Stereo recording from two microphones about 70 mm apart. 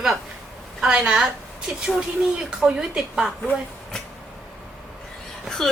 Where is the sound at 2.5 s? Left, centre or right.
Centre.